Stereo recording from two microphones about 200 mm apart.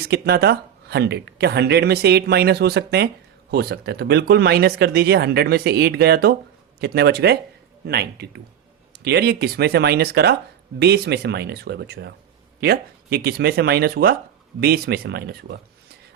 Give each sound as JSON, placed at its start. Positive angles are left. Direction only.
{"t": 0.0, "sound": "speech", "side_deg": -55}